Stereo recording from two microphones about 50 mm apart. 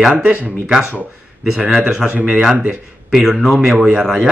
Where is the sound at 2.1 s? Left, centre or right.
Right.